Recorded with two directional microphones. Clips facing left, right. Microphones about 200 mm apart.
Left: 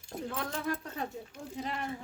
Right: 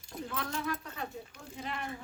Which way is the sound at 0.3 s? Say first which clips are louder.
Left 1 dB; 30° left (ahead or behind).